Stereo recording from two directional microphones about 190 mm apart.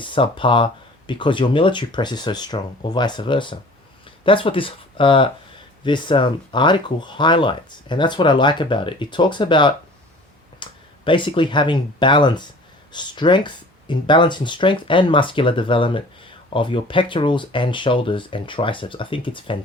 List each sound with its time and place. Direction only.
0.0 s speech: 25° left (ahead or behind)